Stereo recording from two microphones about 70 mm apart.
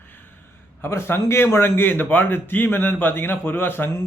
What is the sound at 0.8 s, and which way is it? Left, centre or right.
A man's voice, left.